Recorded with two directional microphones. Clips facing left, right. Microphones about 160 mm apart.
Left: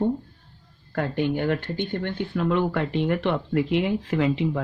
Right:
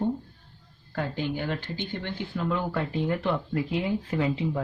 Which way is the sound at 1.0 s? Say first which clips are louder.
Left 5 dB; 60° left (ahead or behind).